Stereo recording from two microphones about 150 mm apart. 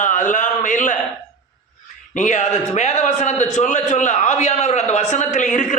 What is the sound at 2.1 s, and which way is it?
A man's voice, 55° left (ahead or behind).